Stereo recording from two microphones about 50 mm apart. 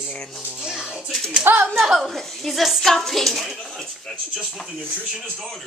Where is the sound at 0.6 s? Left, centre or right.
Centre.